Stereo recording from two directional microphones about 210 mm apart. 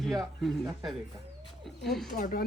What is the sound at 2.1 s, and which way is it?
Speech, 40° left (ahead or behind).